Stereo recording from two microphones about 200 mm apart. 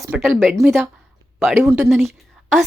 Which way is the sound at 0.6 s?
Centre (ahead or behind).